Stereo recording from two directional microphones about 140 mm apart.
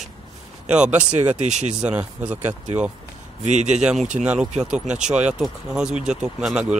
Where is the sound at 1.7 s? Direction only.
10° right (ahead or behind).